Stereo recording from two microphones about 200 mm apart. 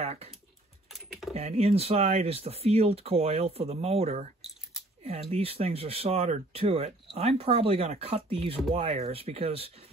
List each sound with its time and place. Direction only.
0.0 s typing: 30° right (ahead or behind)
1.3 s speech: 30° right (ahead or behind)